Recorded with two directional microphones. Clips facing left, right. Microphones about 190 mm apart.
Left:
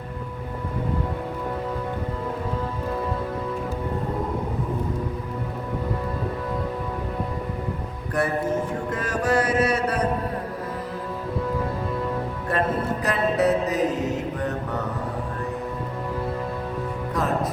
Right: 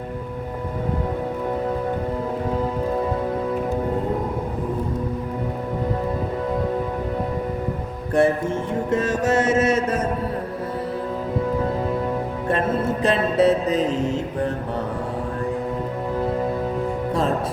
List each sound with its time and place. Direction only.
8.1 s music: 25° right (ahead or behind)
12.5 s music: 25° right (ahead or behind)